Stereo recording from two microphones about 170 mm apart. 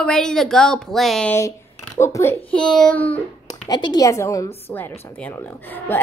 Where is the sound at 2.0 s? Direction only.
15° left (ahead or behind).